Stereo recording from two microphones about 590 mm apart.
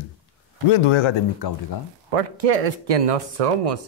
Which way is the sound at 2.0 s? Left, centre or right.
Right.